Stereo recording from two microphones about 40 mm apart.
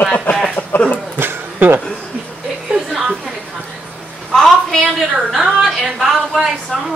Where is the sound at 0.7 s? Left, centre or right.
Left.